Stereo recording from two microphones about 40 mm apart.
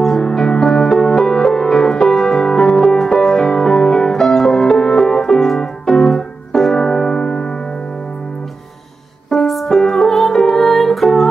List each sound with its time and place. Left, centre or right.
0.0 s music: centre
9.5 s music: centre